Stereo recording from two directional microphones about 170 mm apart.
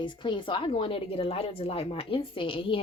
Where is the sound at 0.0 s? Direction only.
30° left (ahead or behind).